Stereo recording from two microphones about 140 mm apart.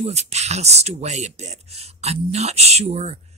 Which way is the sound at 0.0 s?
50° right (ahead or behind).